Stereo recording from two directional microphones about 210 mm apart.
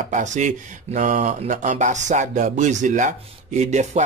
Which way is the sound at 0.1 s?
35° right (ahead or behind).